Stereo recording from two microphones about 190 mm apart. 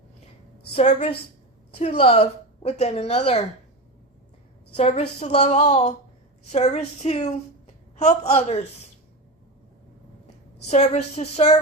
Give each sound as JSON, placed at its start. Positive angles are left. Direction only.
{"t": 0.7, "sound": "a woman's voice", "side_deg": 35}
{"t": 4.8, "sound": "a woman's voice", "side_deg": 35}
{"t": 10.7, "sound": "a woman's voice", "side_deg": 35}